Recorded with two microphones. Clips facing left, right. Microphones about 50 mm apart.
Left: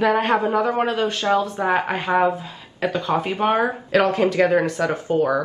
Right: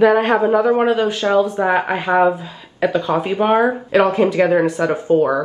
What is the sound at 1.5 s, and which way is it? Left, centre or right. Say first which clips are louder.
Speech: right 4 dB; right.